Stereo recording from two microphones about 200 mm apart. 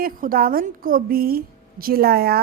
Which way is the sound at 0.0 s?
45° right (ahead or behind).